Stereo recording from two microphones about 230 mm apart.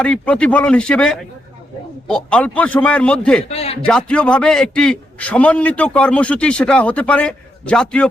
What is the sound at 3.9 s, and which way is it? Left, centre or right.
A man's voice, centre.